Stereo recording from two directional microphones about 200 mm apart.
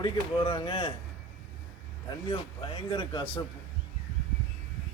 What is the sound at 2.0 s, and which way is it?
A man's voice, 25° left (ahead or behind).